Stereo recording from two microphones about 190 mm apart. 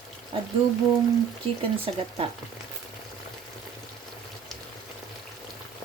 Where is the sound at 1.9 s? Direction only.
30° right (ahead or behind).